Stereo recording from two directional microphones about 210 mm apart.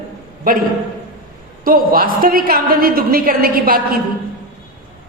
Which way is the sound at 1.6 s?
45° right (ahead or behind).